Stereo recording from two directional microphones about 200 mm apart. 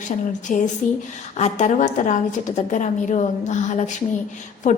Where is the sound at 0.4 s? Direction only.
40° left (ahead or behind).